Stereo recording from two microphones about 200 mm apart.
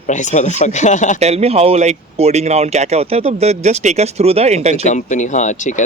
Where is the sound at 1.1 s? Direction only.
30° right (ahead or behind).